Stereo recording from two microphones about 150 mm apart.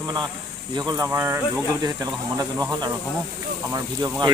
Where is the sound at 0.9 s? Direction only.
25° right (ahead or behind).